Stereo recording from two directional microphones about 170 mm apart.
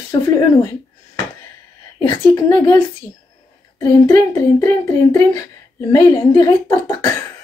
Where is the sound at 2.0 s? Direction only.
25° left (ahead or behind).